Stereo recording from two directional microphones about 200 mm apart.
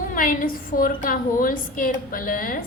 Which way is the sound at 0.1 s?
45° left (ahead or behind).